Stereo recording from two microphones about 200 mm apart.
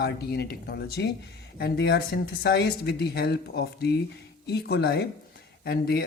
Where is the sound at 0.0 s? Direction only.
55° left (ahead or behind).